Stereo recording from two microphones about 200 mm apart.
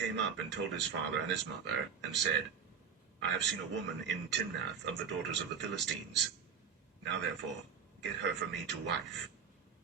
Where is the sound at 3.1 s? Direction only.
60° right (ahead or behind).